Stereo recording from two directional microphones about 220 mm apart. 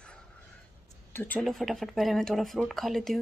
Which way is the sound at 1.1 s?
5° left (ahead or behind).